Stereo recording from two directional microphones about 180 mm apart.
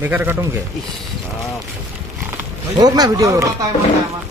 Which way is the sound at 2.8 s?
20° right (ahead or behind).